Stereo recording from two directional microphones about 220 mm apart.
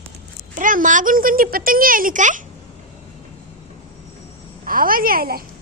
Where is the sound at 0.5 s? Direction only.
35° right (ahead or behind).